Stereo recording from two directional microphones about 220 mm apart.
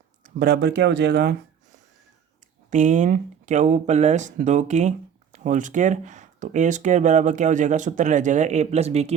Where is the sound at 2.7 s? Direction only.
35° right (ahead or behind).